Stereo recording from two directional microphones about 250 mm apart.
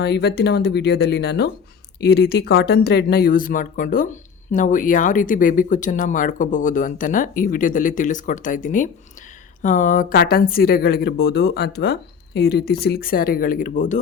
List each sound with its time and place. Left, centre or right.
0.0 s speech: left